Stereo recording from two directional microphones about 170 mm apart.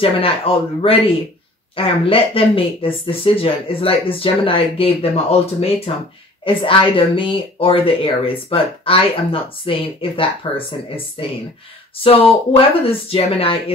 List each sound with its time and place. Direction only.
0.0 s speech: 35° left (ahead or behind)